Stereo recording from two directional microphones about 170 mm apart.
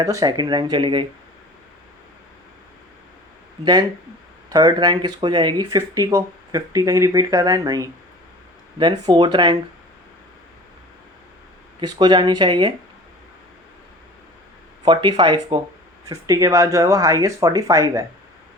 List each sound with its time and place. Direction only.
0.0 s speech: 20° right (ahead or behind)
3.6 s speech: 25° right (ahead or behind)
11.8 s speech: 25° right (ahead or behind)
14.8 s speech: 25° right (ahead or behind)